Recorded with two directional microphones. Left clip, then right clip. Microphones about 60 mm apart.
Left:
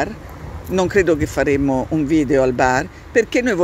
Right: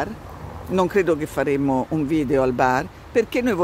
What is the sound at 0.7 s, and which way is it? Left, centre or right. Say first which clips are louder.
Speech: left 3 dB; right.